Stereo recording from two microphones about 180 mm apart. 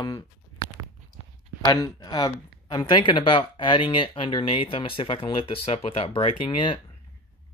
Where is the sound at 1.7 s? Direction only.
20° left (ahead or behind).